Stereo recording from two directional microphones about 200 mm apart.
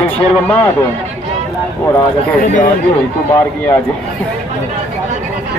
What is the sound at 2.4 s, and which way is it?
Speech, 40° left (ahead or behind).